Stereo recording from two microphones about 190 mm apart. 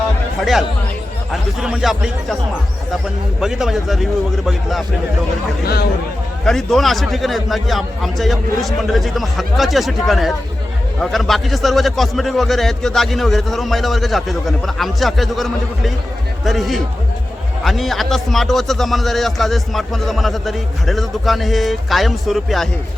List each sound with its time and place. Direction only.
0.3 s a man's voice: centre (ahead or behind)
3.4 s a man's voice: 5° right (ahead or behind)
5.6 s speech: 55° left (ahead or behind)
6.4 s a man's voice: centre (ahead or behind)